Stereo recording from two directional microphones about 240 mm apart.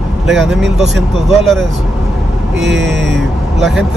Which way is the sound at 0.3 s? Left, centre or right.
Centre.